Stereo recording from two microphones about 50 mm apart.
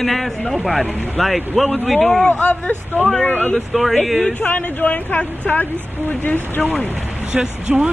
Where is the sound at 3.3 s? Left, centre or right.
Left.